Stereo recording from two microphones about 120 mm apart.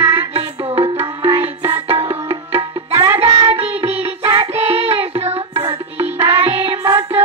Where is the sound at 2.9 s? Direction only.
20° right (ahead or behind).